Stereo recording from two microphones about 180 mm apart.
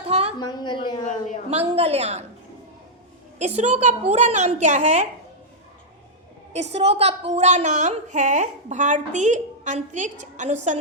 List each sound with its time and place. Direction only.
0.1 s a sound: 35° right (ahead or behind)
0.3 s a woman's voice: 25° left (ahead or behind)
1.5 s a woman's voice: 35° right (ahead or behind)
3.3 s a woman's voice: 40° right (ahead or behind)
6.7 s a woman's voice: 35° right (ahead or behind)